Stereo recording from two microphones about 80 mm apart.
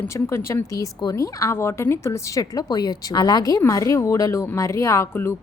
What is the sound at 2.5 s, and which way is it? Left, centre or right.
A woman's voice, left.